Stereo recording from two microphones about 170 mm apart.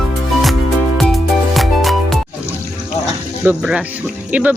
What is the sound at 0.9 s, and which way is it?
Music, centre (ahead or behind).